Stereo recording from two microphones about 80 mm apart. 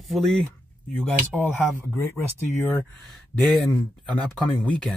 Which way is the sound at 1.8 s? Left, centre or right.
Left.